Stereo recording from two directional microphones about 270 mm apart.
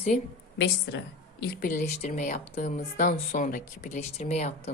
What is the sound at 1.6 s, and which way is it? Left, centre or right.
A woman's voice, left.